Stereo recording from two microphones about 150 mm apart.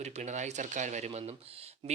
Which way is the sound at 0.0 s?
50° right (ahead or behind).